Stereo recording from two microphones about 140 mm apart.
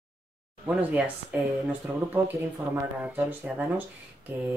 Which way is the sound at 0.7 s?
10° right (ahead or behind).